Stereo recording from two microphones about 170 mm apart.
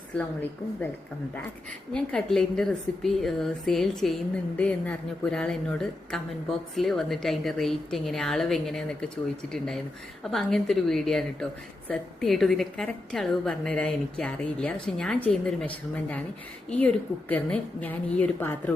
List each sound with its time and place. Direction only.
1.9 s a woman's voice: 5° left (ahead or behind)